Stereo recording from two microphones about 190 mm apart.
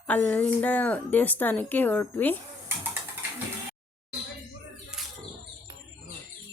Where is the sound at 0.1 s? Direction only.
10° left (ahead or behind).